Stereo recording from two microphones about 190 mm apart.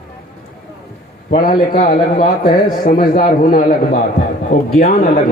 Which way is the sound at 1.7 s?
45° left (ahead or behind).